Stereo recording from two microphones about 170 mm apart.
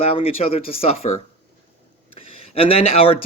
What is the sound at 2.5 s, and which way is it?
Speech, 35° left (ahead or behind).